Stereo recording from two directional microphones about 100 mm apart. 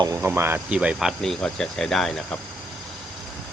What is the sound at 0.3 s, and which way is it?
Speech, 20° right (ahead or behind).